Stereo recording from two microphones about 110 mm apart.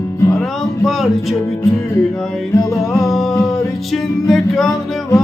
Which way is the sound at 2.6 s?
25° left (ahead or behind).